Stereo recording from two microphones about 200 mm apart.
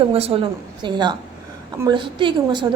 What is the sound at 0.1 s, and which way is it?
A woman's voice, 30° right (ahead or behind).